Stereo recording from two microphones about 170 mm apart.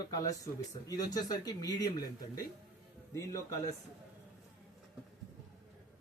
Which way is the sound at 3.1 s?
20° left (ahead or behind).